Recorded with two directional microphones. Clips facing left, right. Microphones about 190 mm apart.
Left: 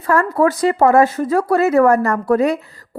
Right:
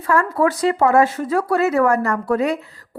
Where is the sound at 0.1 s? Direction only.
40° left (ahead or behind).